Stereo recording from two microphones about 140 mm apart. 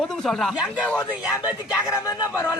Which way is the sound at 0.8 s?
10° left (ahead or behind).